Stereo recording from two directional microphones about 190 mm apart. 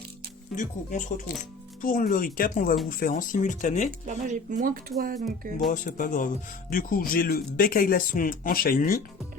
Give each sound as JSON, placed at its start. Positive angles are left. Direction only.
{"t": 0.5, "sound": "speech", "side_deg": 40}
{"t": 4.0, "sound": "speech", "side_deg": -40}
{"t": 5.7, "sound": "speech", "side_deg": 40}